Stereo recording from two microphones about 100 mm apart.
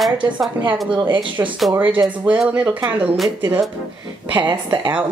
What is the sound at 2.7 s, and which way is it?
Music, 20° right (ahead or behind).